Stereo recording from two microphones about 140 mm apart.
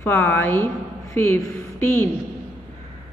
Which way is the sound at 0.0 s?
15° left (ahead or behind).